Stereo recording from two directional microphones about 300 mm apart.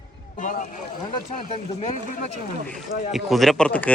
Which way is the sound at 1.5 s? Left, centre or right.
Left.